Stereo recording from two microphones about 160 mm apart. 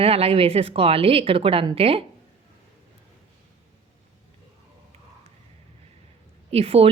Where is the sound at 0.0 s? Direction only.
40° right (ahead or behind).